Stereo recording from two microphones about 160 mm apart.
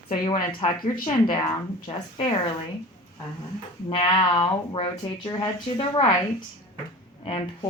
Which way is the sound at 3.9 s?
35° left (ahead or behind).